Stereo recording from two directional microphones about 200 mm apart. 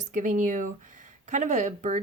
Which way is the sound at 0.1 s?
40° right (ahead or behind).